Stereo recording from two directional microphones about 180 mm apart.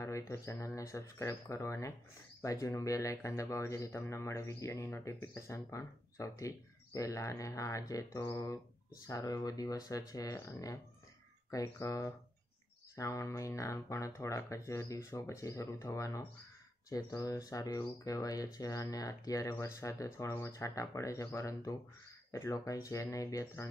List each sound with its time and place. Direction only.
0.0 s a man's voice: 15° left (ahead or behind)